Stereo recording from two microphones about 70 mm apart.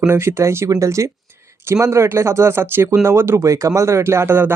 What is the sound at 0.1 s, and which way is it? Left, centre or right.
Speech, right.